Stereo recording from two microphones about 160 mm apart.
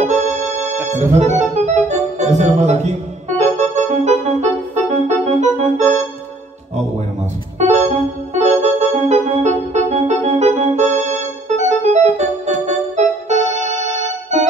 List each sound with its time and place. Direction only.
0.0 s music: 45° right (ahead or behind)
0.9 s organ: 45° right (ahead or behind)
7.5 s keyboard: 45° right (ahead or behind)
8.4 s organ: 45° right (ahead or behind)